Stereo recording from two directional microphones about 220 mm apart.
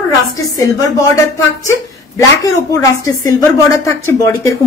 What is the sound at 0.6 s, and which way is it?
Speech, 15° left (ahead or behind).